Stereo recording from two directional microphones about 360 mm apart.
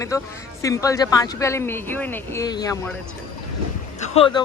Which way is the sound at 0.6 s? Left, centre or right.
Centre.